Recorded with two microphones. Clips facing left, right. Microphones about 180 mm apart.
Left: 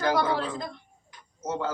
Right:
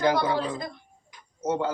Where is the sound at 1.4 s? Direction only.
15° right (ahead or behind).